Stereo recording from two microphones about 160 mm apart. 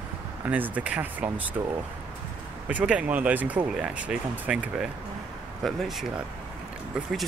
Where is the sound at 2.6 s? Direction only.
10° right (ahead or behind).